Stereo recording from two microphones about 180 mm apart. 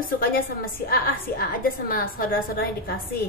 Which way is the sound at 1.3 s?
55° left (ahead or behind).